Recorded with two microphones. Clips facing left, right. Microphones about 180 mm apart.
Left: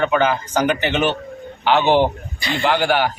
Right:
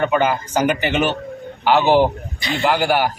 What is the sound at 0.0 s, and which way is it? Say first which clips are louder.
A man's voice: even; 10° right (ahead or behind).